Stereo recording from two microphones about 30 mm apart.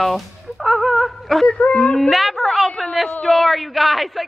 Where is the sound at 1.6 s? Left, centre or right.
Left.